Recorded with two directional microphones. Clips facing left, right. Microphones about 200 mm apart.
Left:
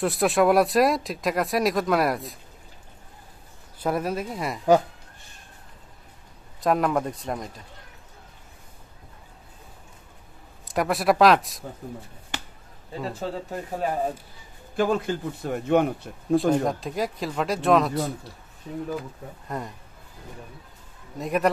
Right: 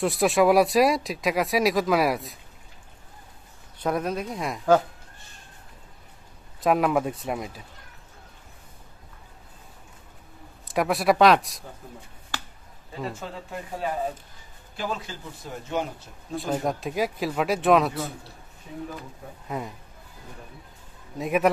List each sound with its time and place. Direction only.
0.0 s speech: centre (ahead or behind)
3.8 s speech: 5° left (ahead or behind)
6.6 s speech: 5° right (ahead or behind)
10.7 s speech: centre (ahead or behind)
12.3 s chop: 20° left (ahead or behind)
13.1 s speech: 40° left (ahead or behind)
14.8 s speech: 50° left (ahead or behind)
16.3 s speech: centre (ahead or behind)
19.4 s speech: 5° right (ahead or behind)
21.2 s speech: 5° right (ahead or behind)